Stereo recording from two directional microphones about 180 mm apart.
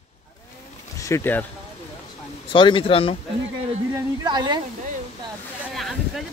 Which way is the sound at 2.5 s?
30° left (ahead or behind).